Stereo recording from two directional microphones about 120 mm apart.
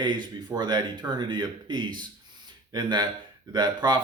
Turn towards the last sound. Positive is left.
turn(degrees=-35)  # may be behind; listen again after turning